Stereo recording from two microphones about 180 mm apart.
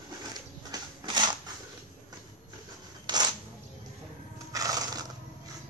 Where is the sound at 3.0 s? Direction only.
25° right (ahead or behind).